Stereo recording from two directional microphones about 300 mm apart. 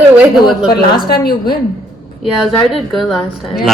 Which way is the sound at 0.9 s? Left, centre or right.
Left.